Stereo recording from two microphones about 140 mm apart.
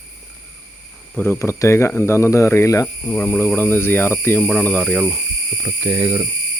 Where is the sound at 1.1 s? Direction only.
15° left (ahead or behind).